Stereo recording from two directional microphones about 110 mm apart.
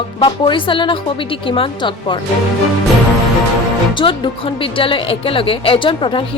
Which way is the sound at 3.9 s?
50° left (ahead or behind).